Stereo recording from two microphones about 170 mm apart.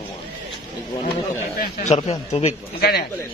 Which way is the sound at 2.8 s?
65° left (ahead or behind).